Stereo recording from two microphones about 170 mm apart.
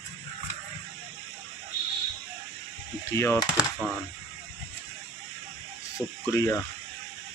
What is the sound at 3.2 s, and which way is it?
Speech, 20° left (ahead or behind).